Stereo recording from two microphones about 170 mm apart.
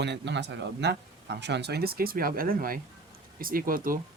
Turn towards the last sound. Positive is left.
turn(degrees=-55)  # may be behind; listen again after turning